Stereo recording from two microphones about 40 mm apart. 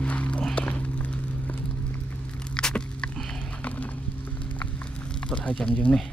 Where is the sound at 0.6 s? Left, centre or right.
Left.